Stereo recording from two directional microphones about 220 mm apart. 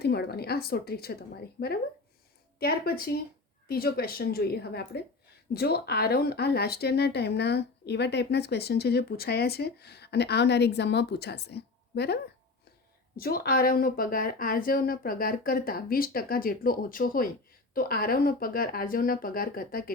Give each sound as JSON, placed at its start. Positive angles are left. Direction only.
{"t": 0.0, "sound": "speech", "side_deg": 45}